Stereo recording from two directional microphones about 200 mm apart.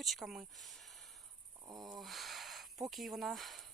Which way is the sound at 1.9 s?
Centre (ahead or behind).